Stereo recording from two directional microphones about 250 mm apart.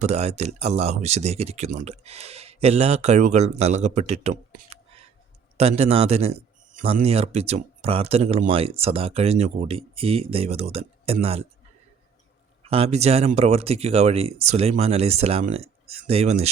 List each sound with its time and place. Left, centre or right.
0.0 s a man's voice: right
12.6 s a man's voice: right